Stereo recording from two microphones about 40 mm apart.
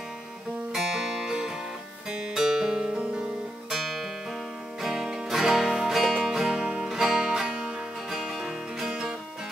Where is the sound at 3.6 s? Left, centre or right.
Centre.